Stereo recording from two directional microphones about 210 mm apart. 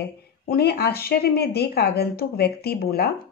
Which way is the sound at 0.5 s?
50° left (ahead or behind).